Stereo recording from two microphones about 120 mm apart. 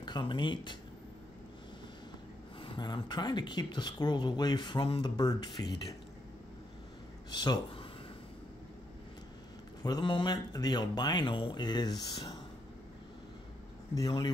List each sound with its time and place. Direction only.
0.0 s speech: 40° left (ahead or behind)
2.6 s speech: 40° left (ahead or behind)
5.0 s speech: 30° left (ahead or behind)
7.2 s speech: 35° left (ahead or behind)
9.8 s speech: 40° left (ahead or behind)
13.9 s speech: 40° left (ahead or behind)